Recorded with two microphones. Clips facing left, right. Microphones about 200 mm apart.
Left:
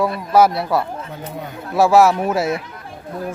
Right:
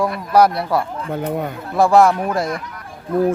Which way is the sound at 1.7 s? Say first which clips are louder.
Even; 5° left (ahead or behind).